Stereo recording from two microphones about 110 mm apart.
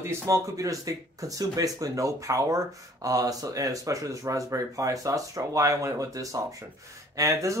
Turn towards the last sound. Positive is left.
turn(degrees=-30)  # may be behind; listen again after turning